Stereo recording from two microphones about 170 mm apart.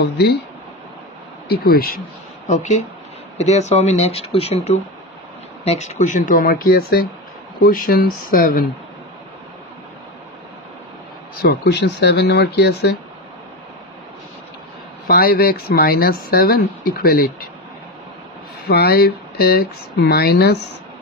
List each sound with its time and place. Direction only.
0.0 s speech: 70° left (ahead or behind)
1.5 s speech: 65° left (ahead or behind)
2.4 s speech: 45° left (ahead or behind)
11.4 s speech: 80° left
15.0 s speech: 65° left (ahead or behind)
18.7 s speech: 65° left (ahead or behind)